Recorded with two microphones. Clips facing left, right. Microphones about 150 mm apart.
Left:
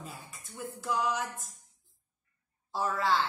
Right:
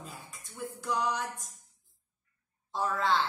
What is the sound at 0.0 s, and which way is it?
Speech, centre (ahead or behind).